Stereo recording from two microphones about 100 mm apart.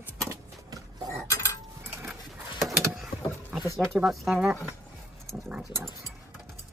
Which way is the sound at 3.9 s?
5° right (ahead or behind).